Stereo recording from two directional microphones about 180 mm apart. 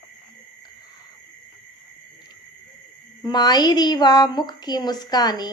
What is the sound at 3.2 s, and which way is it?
Speech, 25° left (ahead or behind).